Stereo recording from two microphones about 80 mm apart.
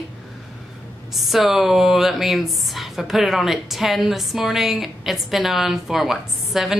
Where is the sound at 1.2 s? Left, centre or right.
Centre.